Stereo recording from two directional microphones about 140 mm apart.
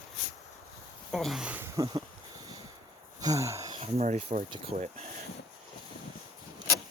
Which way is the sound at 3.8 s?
50° right (ahead or behind).